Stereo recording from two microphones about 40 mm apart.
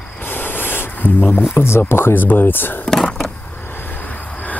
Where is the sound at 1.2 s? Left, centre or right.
Left.